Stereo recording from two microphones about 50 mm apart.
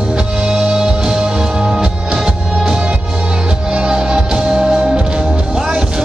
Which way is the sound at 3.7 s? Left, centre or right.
Centre.